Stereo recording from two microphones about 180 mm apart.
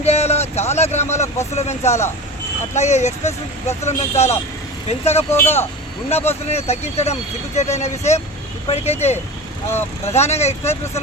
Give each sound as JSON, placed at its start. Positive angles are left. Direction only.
{"t": 0.0, "sound": "a sound", "side_deg": 35}
{"t": 1.5, "sound": "speech", "side_deg": 40}
{"t": 5.3, "sound": "speech", "side_deg": 15}
{"t": 6.1, "sound": "speech", "side_deg": 35}